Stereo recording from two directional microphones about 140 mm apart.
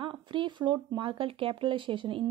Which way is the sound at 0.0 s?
35° right (ahead or behind).